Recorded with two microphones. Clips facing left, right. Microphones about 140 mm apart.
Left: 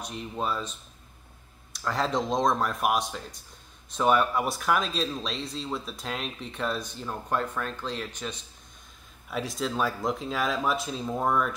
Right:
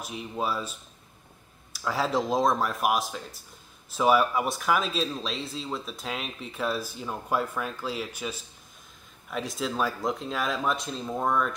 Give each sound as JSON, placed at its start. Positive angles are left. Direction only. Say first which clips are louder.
{"t": 0.0, "sound": "speech", "louder": "right 1 dB", "side_deg": -5}